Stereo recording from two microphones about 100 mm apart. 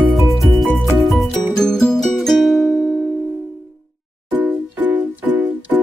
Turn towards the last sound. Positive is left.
turn(degrees=-15)  # may be behind; listen again after turning